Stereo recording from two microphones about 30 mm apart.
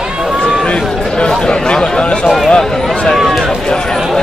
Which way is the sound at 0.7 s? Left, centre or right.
Left.